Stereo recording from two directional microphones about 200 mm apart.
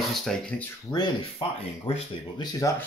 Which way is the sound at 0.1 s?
5° left (ahead or behind).